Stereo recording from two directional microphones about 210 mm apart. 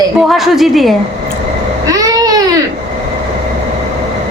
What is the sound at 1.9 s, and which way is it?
Babbling, 15° right (ahead or behind).